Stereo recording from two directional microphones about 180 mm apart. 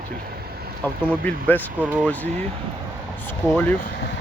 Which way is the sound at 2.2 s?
40° right (ahead or behind).